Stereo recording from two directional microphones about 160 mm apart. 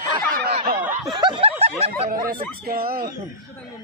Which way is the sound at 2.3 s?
70° right (ahead or behind).